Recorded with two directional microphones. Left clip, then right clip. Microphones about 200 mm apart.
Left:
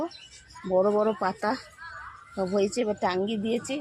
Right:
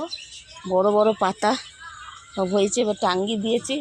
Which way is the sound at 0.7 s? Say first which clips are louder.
Right 5 dB; 20° right (ahead or behind).